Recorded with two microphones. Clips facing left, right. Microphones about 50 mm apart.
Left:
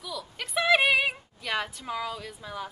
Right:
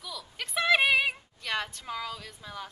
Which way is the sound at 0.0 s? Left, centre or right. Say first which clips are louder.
Left 3 dB; centre.